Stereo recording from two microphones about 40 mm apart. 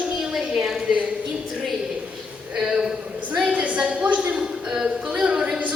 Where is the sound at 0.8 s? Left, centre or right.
Right.